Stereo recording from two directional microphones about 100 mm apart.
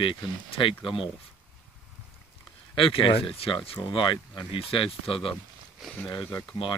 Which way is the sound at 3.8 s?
55° left (ahead or behind).